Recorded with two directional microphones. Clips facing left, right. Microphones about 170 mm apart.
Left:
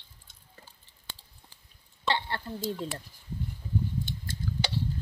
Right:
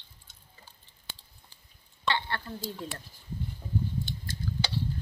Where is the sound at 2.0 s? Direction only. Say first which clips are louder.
Left 1 dB; 30° left (ahead or behind).